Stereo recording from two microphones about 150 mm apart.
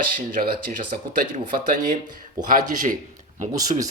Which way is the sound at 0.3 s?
70° right (ahead or behind).